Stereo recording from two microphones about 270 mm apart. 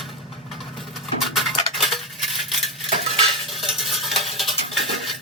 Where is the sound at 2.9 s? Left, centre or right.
Right.